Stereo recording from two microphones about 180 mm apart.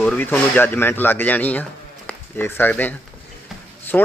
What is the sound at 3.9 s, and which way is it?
Speech, 5° left (ahead or behind).